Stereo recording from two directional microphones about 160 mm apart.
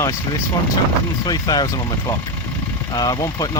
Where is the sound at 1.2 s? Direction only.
25° left (ahead or behind).